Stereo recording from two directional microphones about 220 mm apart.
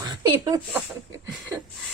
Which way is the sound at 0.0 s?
15° right (ahead or behind).